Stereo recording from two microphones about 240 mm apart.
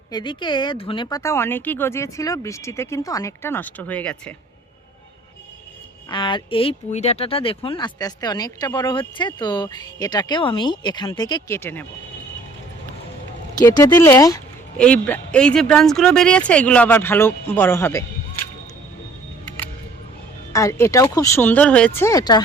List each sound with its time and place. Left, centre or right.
0.1 s speech: centre
6.1 s speech: centre
13.6 s speech: centre
20.5 s speech: centre